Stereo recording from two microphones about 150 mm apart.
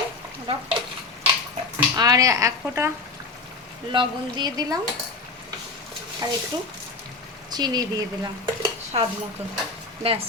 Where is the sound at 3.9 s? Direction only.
30° right (ahead or behind).